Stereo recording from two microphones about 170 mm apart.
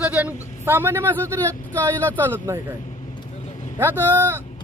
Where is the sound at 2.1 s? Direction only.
15° right (ahead or behind).